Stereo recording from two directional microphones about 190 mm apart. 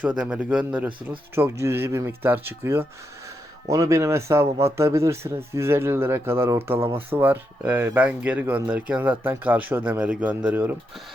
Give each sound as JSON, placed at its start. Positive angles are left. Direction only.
{"t": 0.2, "sound": "a man's voice", "side_deg": -5}